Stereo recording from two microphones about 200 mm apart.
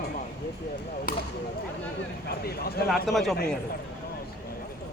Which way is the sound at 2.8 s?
Centre (ahead or behind).